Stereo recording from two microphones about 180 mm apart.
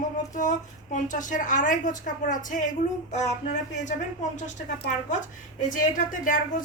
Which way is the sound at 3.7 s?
45° left (ahead or behind).